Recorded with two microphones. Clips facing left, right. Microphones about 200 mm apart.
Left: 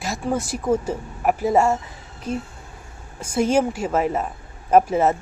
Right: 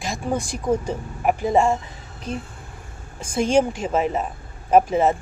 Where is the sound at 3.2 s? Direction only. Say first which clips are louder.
Even; 10° left (ahead or behind).